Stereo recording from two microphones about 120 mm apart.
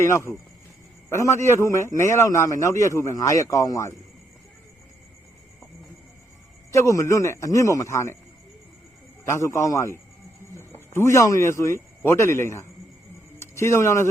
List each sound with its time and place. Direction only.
0.0 s a man's voice: 20° left (ahead or behind)
6.7 s a man's voice: 25° left (ahead or behind)
9.2 s a man's voice: 25° left (ahead or behind)